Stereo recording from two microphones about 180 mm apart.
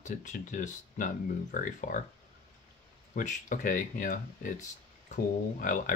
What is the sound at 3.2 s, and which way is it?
Speech, 45° left (ahead or behind).